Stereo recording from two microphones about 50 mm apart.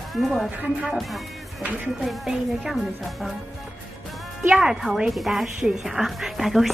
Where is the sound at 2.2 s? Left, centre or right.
Centre.